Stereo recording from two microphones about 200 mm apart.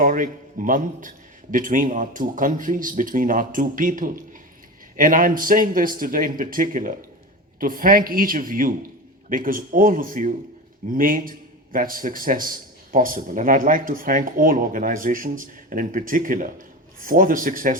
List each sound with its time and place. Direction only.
0.0 s a man's voice: 40° right (ahead or behind)